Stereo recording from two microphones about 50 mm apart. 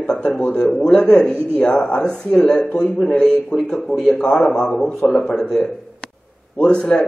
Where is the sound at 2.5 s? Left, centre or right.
Left.